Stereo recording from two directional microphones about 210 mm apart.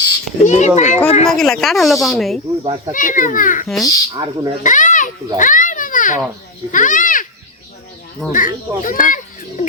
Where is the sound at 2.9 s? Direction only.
40° left (ahead or behind).